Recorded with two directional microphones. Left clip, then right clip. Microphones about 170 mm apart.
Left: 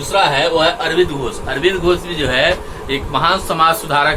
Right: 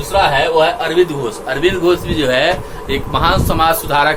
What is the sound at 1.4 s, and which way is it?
A man's voice, 40° right (ahead or behind).